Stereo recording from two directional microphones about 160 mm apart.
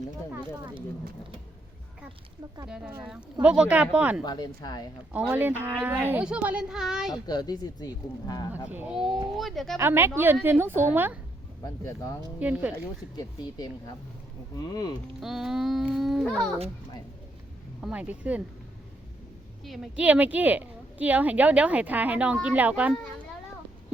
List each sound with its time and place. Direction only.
2.6 s a child's voice: 5° right (ahead or behind)
4.2 s speech: 25° left (ahead or behind)
5.1 s a woman's voice: 10° right (ahead or behind)
7.1 s speech: 25° left (ahead or behind)
8.7 s a child's voice: 10° right (ahead or behind)
9.7 s a woman's voice: 15° right (ahead or behind)
12.4 s a woman's voice: 10° right (ahead or behind)
13.1 s speech: 25° left (ahead or behind)
15.2 s a child's voice: centre (ahead or behind)
17.8 s a woman's voice: 10° right (ahead or behind)
19.6 s a woman's voice: centre (ahead or behind)